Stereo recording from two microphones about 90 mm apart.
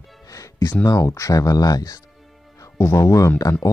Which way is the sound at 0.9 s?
35° left (ahead or behind).